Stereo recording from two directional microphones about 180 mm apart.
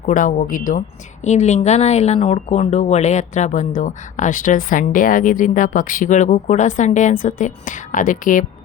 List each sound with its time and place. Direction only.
0.0 s speech: 45° left (ahead or behind)